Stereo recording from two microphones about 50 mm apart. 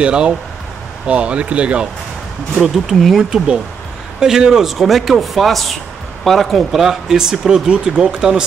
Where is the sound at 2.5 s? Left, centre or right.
Centre.